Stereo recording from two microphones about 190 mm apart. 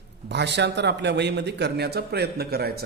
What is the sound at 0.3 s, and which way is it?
A man's voice, 65° right (ahead or behind).